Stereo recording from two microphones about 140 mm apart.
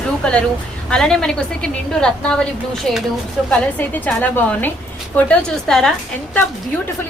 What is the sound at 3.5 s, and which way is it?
A woman's voice, 10° left (ahead or behind).